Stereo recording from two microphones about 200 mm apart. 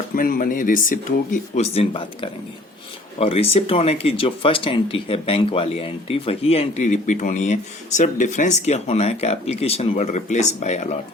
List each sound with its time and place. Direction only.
0.2 s speech: 45° left (ahead or behind)